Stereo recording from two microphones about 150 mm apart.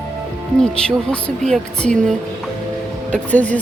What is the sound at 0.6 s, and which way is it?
Speech, 5° left (ahead or behind).